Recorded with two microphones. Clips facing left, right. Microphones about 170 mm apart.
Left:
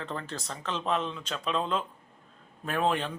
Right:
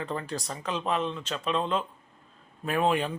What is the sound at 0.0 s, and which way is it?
Speech, 5° right (ahead or behind).